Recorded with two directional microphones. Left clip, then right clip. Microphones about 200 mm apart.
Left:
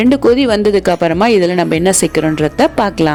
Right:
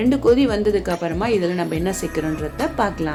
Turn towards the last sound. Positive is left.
turn(degrees=50)  # may be behind; listen again after turning